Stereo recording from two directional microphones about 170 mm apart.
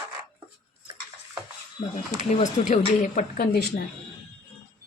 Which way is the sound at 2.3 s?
45° left (ahead or behind).